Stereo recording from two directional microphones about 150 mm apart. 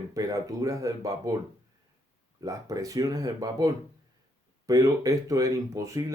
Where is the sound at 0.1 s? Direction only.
20° right (ahead or behind).